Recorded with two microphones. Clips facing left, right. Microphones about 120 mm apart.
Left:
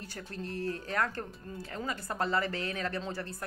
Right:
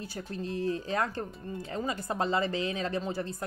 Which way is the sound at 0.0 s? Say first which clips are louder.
Right 4 dB; 15° right (ahead or behind).